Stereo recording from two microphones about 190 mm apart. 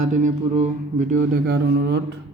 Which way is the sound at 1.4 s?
60° right (ahead or behind).